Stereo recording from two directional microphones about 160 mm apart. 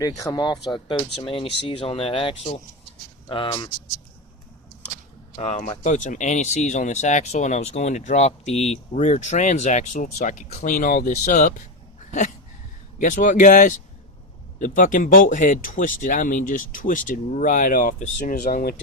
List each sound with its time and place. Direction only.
0.2 s speech: 25° left (ahead or behind)
5.4 s speech: 40° left (ahead or behind)
13.0 s speech: 55° left (ahead or behind)